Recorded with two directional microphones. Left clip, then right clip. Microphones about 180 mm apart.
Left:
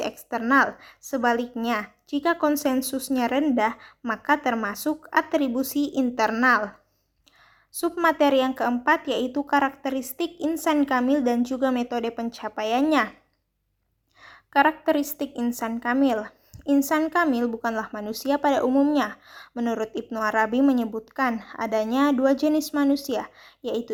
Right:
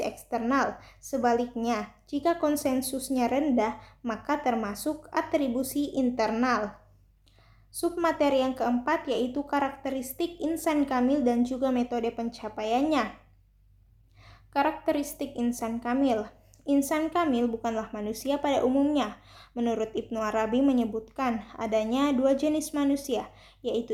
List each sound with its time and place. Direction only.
0.0 s a woman's voice: 30° left (ahead or behind)
7.7 s a woman's voice: 30° left (ahead or behind)
14.2 s a woman's voice: 30° left (ahead or behind)